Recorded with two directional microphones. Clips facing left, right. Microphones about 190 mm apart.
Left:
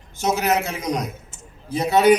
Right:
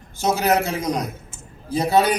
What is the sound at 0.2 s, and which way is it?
A man's voice, 30° right (ahead or behind).